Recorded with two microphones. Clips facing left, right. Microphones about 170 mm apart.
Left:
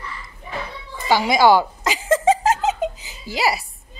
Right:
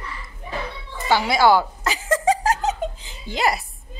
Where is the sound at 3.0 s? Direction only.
5° left (ahead or behind).